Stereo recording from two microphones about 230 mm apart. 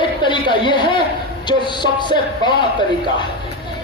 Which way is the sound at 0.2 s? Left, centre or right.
Left.